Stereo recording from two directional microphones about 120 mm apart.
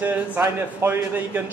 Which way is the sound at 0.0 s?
15° right (ahead or behind).